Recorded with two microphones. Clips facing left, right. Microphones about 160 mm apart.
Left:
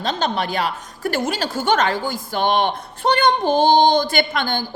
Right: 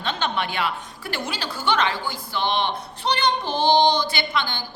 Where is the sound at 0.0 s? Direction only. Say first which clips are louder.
Left 4 dB; 40° left (ahead or behind).